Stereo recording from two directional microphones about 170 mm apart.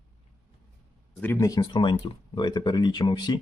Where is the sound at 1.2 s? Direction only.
15° left (ahead or behind).